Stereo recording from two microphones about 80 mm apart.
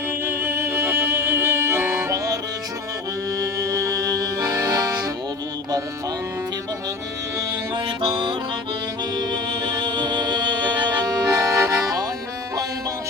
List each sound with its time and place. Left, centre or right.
0.3 s music: right
3.7 s accordion: right
8.0 s music: right
9.1 s music: right